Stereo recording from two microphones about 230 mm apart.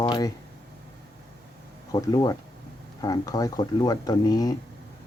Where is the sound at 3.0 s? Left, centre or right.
Centre.